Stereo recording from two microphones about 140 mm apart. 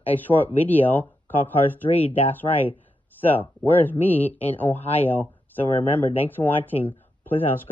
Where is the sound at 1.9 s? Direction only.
45° left (ahead or behind).